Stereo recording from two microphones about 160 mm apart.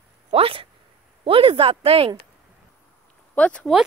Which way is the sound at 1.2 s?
35° right (ahead or behind).